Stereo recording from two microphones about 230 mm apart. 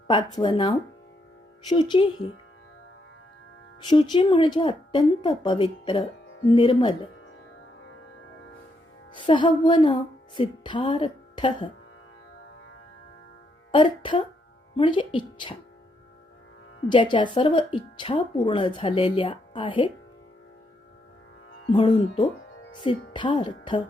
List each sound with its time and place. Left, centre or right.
0.1 s speech: centre
3.8 s speech: left
9.1 s speech: left
13.7 s speech: left
16.9 s speech: left
21.7 s speech: left